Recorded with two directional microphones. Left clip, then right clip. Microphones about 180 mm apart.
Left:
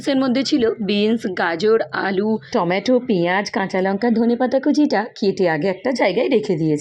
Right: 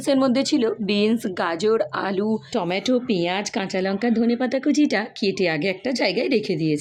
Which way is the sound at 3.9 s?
10° right (ahead or behind).